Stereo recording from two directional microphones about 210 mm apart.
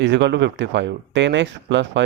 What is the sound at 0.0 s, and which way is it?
Speech, 55° right (ahead or behind).